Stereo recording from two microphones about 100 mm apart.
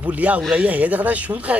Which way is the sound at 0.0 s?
15° right (ahead or behind).